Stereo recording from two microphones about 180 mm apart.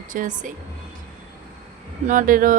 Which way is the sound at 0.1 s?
45° right (ahead or behind).